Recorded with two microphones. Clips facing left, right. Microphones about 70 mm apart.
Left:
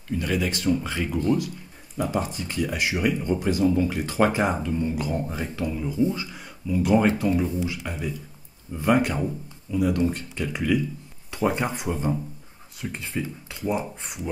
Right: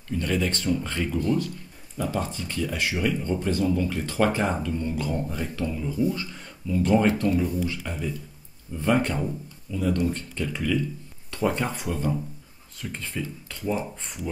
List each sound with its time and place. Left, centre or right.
0.1 s speech: centre